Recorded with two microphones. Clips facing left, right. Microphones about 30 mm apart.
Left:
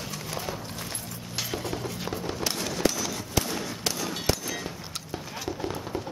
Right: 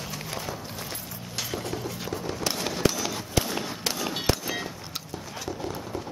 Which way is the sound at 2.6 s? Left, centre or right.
Centre.